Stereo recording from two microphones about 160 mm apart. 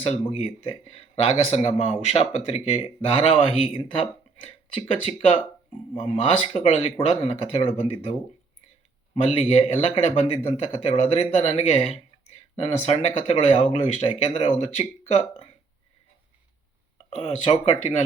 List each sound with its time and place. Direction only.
0.0 s speech: 40° left (ahead or behind)
9.2 s speech: 40° left (ahead or behind)
17.2 s speech: 35° left (ahead or behind)